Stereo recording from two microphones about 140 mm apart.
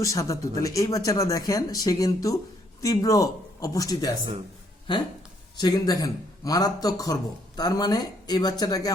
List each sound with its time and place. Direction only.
0.0 s speech: 20° left (ahead or behind)
5.5 s speech: 30° left (ahead or behind)